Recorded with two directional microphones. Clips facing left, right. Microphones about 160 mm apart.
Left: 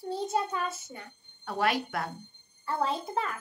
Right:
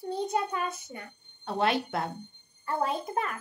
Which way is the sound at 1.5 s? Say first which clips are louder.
Right 1 dB; 25° right (ahead or behind).